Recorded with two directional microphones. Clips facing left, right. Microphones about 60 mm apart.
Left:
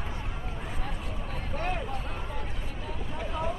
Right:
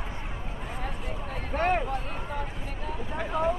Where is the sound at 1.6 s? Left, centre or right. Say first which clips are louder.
Right 8 dB; right.